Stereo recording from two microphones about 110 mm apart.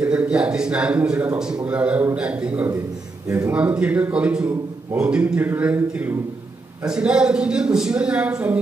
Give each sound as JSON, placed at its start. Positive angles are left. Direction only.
{"t": 0.0, "sound": "a man's voice", "side_deg": -10}
{"t": 3.3, "sound": "a man's voice", "side_deg": -25}
{"t": 3.5, "sound": "a man's voice", "side_deg": -10}